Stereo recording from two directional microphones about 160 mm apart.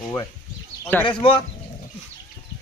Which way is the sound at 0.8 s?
10° left (ahead or behind).